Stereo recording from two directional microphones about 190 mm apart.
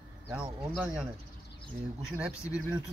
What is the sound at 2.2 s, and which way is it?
Speech, 5° right (ahead or behind).